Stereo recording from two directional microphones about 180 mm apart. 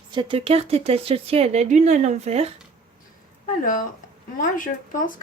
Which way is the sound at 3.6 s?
50° left (ahead or behind).